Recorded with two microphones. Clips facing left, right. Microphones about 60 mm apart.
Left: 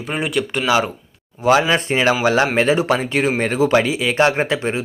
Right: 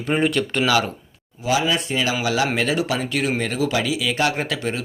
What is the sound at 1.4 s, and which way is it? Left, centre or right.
Speech, left.